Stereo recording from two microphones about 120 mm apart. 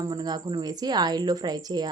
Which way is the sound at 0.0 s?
30° right (ahead or behind).